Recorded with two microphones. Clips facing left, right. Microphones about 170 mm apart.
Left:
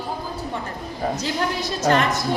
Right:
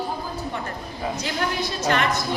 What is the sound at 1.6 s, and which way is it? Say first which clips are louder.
Speech: left 4 dB; 40° left (ahead or behind).